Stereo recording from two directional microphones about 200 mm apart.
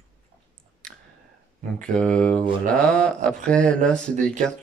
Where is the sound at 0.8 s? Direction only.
5° left (ahead or behind).